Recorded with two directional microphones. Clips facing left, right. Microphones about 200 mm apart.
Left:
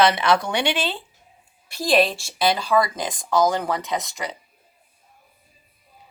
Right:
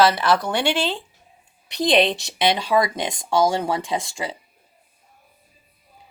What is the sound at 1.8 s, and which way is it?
Speech, 20° right (ahead or behind).